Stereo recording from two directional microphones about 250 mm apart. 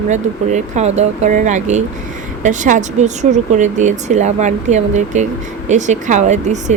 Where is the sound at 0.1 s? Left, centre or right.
Right.